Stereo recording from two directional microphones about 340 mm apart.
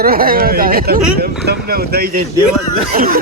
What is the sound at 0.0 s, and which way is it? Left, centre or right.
Speech, right.